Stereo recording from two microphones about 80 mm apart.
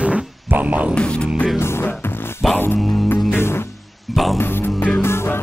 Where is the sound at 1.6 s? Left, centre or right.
Left.